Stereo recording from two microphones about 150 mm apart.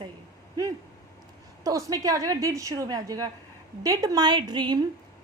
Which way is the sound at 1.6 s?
25° right (ahead or behind).